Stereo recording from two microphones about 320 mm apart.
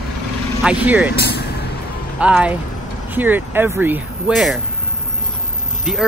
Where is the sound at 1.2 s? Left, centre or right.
Left.